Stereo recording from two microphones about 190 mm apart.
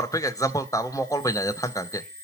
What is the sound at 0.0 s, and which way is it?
A man's voice, 15° left (ahead or behind).